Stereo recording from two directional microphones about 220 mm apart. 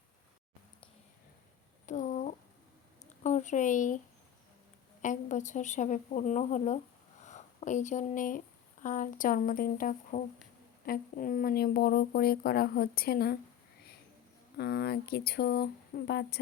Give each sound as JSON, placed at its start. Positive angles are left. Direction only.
{"t": 1.9, "sound": "a sound", "side_deg": 35}
{"t": 5.0, "sound": "a woman's voice", "side_deg": 35}
{"t": 14.6, "sound": "speech", "side_deg": 45}